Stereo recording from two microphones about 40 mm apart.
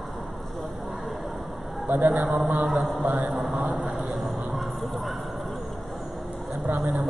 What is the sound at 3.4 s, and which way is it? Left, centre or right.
Speech, centre.